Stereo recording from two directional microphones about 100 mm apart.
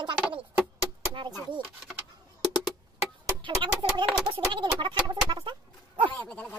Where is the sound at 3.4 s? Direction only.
55° right (ahead or behind).